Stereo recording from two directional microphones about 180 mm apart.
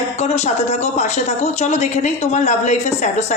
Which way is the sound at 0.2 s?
40° left (ahead or behind).